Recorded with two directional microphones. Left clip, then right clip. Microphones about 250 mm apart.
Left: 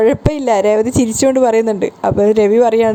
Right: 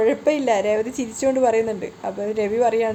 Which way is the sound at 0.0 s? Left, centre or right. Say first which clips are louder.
Left 5 dB; left.